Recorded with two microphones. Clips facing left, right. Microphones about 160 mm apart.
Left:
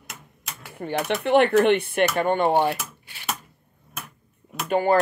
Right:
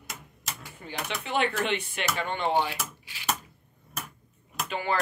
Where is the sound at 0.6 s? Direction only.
60° left (ahead or behind).